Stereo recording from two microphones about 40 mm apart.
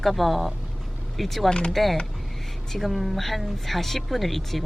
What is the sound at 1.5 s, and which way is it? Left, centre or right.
Speech, left.